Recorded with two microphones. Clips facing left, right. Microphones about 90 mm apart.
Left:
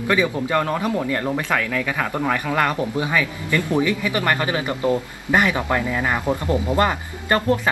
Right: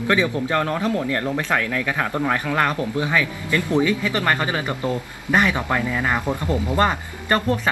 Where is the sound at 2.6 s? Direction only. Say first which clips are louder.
Even; 20° left (ahead or behind).